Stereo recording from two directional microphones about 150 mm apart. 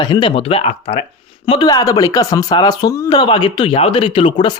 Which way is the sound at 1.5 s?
30° left (ahead or behind).